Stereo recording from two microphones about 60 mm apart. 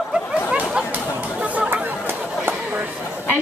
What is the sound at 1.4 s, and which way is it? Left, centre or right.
Chatter, right.